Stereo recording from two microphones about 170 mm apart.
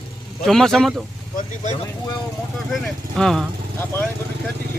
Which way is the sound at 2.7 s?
Centre (ahead or behind).